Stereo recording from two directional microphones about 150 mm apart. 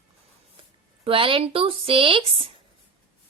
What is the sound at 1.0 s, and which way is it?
Speech, 35° right (ahead or behind).